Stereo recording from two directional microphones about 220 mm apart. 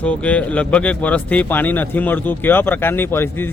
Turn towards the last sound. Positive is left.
turn(degrees=10)  # may be behind; listen again after turning